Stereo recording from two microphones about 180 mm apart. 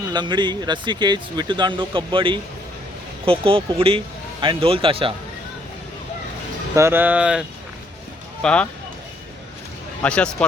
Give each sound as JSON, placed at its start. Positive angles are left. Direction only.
{"t": 0.1, "sound": "speech", "side_deg": -25}
{"t": 6.7, "sound": "speech", "side_deg": -15}
{"t": 8.4, "sound": "speech", "side_deg": 5}
{"t": 10.0, "sound": "speech", "side_deg": 5}